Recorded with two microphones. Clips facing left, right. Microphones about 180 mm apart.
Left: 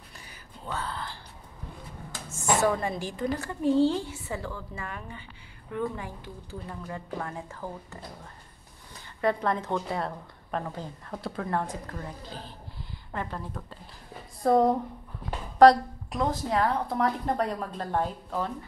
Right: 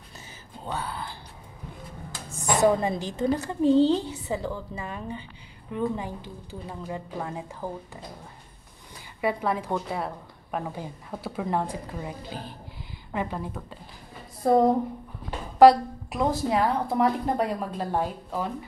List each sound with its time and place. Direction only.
0.7 s speech: 15° right (ahead or behind)
2.2 s a sound: 35° right (ahead or behind)
2.6 s a woman's voice: 20° right (ahead or behind)
9.2 s a woman's voice: 5° right (ahead or behind)